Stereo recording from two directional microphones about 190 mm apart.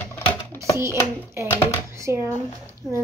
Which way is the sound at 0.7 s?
15° right (ahead or behind).